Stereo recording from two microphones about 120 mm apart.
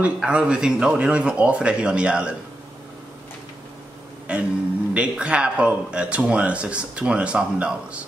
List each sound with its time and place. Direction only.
0.0 s speech: 10° right (ahead or behind)
4.3 s speech: 10° right (ahead or behind)